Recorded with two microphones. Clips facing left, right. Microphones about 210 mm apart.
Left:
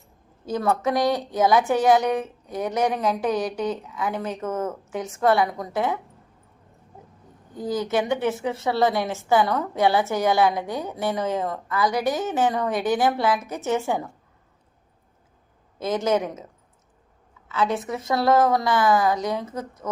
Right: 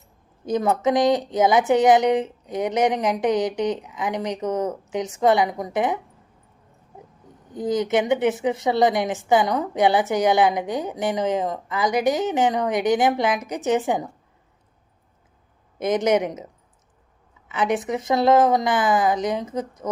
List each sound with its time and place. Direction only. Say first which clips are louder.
0.4 s speech: right 3 dB; 20° right (ahead or behind)
7.5 s a woman's voice: right 3 dB; 20° right (ahead or behind)
15.8 s speech: right 3 dB; 20° right (ahead or behind)
17.5 s a woman's voice: right 2 dB; 20° right (ahead or behind)